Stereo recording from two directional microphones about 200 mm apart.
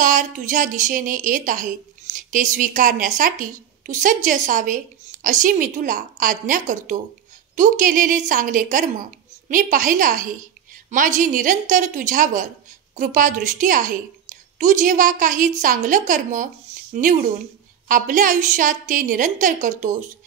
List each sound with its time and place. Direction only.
0.0 s a woman's voice: 40° right (ahead or behind)